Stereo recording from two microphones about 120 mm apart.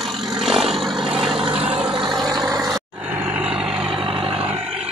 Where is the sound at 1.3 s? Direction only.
50° right (ahead or behind).